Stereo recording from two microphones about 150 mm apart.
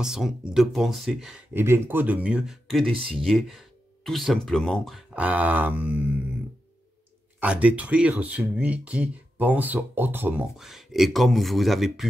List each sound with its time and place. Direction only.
0.0 s speech: 5° right (ahead or behind)
1.5 s speech: 15° right (ahead or behind)
2.9 s speech: 35° right (ahead or behind)
3.3 s speech: centre (ahead or behind)
7.3 s speech: 10° right (ahead or behind)
10.6 s speech: centre (ahead or behind)